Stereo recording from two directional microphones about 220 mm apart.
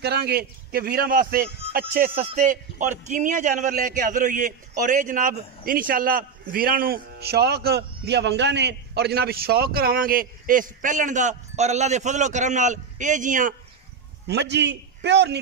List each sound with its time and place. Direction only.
0.0 s a man's voice: 45° right (ahead or behind)
14.2 s a man's voice: 50° right (ahead or behind)